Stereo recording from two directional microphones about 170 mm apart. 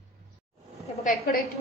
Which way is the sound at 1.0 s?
50° left (ahead or behind).